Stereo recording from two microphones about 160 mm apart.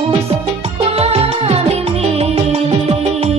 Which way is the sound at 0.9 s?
40° right (ahead or behind).